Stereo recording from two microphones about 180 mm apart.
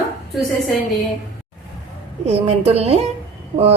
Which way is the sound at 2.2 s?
35° right (ahead or behind).